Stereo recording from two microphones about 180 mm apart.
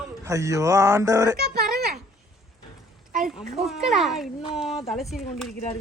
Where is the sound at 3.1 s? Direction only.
45° right (ahead or behind).